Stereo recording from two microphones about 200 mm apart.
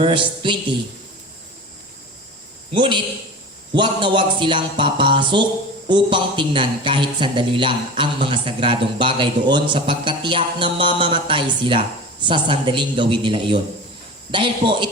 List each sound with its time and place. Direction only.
0.0 s a man's voice: 25° right (ahead or behind)
2.7 s a man's voice: 25° right (ahead or behind)